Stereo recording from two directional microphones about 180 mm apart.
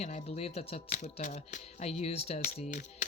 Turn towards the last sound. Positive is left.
turn(degrees=45)  # may be behind; listen again after turning